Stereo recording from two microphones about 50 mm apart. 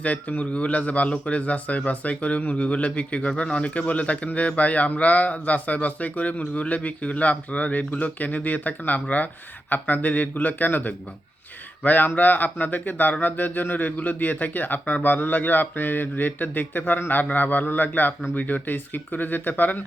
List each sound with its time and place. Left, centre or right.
0.0 s a man's voice: left